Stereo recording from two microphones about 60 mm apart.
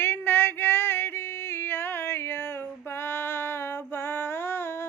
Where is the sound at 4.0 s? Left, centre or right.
Left.